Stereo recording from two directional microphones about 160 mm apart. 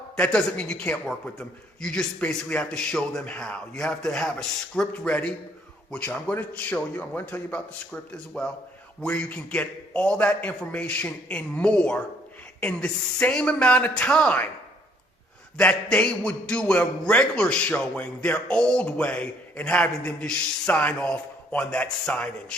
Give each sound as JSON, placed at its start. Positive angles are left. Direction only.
{"t": 0.2, "sound": "a man's voice", "side_deg": 5}
{"t": 15.5, "sound": "a man's voice", "side_deg": 10}